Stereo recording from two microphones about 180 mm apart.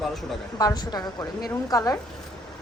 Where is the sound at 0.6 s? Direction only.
20° left (ahead or behind).